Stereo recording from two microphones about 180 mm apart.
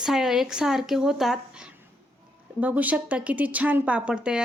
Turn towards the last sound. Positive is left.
turn(degrees=-5)  # may be behind; listen again after turning